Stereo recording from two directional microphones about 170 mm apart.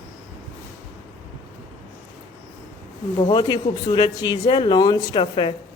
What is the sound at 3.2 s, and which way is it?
Speech, 30° left (ahead or behind).